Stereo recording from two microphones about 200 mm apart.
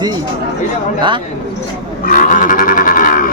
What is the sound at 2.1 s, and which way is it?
Livestock, 40° left (ahead or behind).